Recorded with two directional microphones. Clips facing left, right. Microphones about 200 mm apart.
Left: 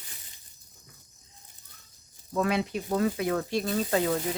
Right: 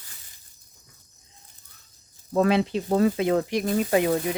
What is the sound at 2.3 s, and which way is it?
Speech, 35° right (ahead or behind).